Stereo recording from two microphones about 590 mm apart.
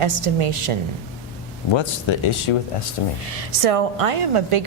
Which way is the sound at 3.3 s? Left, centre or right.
Right.